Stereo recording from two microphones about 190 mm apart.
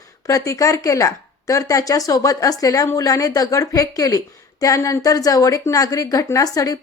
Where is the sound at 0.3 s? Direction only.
15° left (ahead or behind).